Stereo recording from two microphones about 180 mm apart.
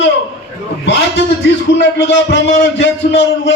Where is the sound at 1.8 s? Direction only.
80° left.